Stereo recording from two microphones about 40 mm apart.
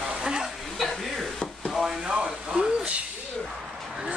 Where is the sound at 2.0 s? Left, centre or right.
Right.